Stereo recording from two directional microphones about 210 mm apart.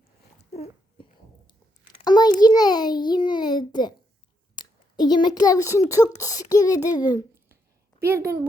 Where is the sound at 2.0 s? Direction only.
20° left (ahead or behind).